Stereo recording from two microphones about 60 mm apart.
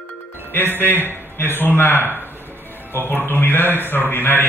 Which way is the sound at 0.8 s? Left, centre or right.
Left.